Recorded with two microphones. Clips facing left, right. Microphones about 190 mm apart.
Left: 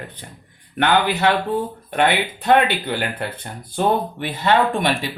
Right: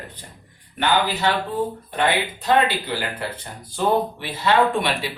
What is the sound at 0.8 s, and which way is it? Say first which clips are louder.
Speech: left 3 dB; 60° left (ahead or behind).